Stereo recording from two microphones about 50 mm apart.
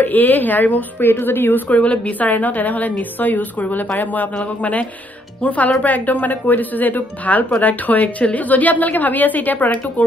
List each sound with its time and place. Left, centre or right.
0.0 s a woman's voice: left
1.7 s a woman's voice: left